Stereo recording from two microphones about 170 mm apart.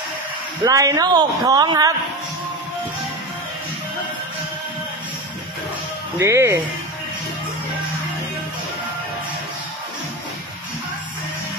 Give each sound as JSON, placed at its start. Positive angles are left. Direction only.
{"t": 0.7, "sound": "a woman's voice", "side_deg": -20}
{"t": 6.1, "sound": "speech", "side_deg": -15}